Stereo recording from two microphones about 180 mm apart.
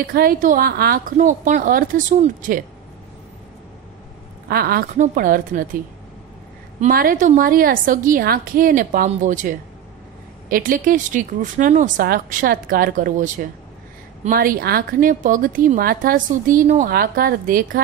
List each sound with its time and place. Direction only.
0.0 s speech: 55° right (ahead or behind)
1.1 s speech: 45° right (ahead or behind)
4.5 s a woman's voice: 60° right (ahead or behind)
4.9 s speech: 45° right (ahead or behind)
6.9 s speech: 55° right (ahead or behind)